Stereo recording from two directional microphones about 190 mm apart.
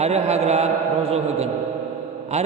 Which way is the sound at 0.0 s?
35° right (ahead or behind).